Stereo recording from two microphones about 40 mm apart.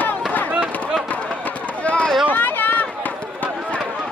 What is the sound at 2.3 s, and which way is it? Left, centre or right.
Run, left.